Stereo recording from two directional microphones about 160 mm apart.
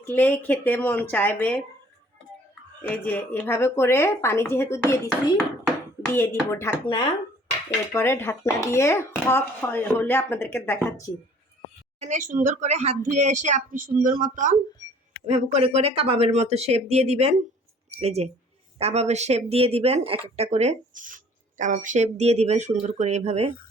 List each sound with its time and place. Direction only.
0.0 s speech: 15° left (ahead or behind)
2.8 s speech: 10° left (ahead or behind)
6.1 s speech: 15° left (ahead or behind)
6.8 s speech: 25° left (ahead or behind)
7.7 s speech: 15° left (ahead or behind)
11.9 s speech: 50° right (ahead or behind)
15.3 s speech: 45° right (ahead or behind)